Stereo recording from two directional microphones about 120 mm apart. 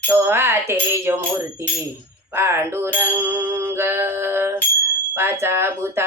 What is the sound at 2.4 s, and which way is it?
Music, 20° right (ahead or behind).